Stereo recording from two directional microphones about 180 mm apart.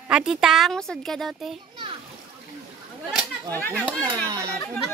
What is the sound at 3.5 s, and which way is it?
Speech, 10° left (ahead or behind).